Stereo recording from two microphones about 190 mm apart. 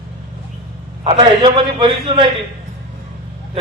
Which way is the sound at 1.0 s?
30° right (ahead or behind).